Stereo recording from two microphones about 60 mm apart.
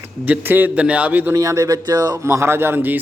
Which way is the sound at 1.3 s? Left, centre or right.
Right.